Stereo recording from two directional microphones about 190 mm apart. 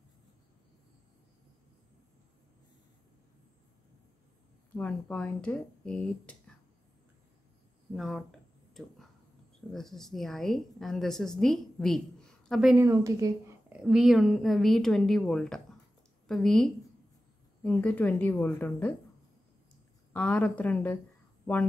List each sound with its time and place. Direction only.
4.7 s a woman's voice: 5° left (ahead or behind)
7.9 s a woman's voice: centre (ahead or behind)
9.7 s a woman's voice: centre (ahead or behind)
12.7 s a woman's voice: 15° right (ahead or behind)
13.7 s a woman's voice: 5° right (ahead or behind)
20.1 s a woman's voice: 5° left (ahead or behind)